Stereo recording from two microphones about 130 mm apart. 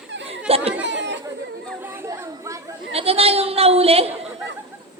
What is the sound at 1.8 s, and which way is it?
Chatter, 20° right (ahead or behind).